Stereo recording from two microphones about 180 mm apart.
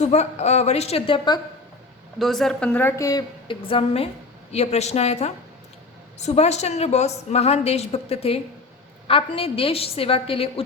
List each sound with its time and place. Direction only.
0.0 s a woman's voice: 40° left (ahead or behind)
2.1 s a woman's voice: centre (ahead or behind); by 10.5 s 30° left (ahead or behind)